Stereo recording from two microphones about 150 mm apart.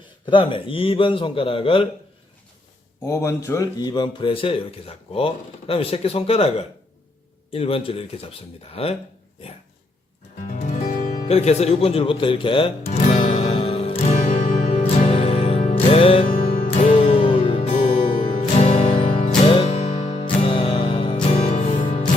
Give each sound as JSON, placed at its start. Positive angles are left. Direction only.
{"t": 0.3, "sound": "speech", "side_deg": 35}
{"t": 3.0, "sound": "speech", "side_deg": 20}
{"t": 10.5, "sound": "music", "side_deg": 55}
{"t": 11.3, "sound": "music", "side_deg": 45}
{"t": 19.6, "sound": "music", "side_deg": 50}
{"t": 20.2, "sound": "music", "side_deg": 35}
{"t": 21.2, "sound": "music", "side_deg": 50}